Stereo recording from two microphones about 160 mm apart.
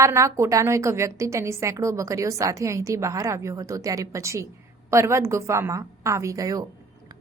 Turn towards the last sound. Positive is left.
turn(degrees=-20)  # may be behind; listen again after turning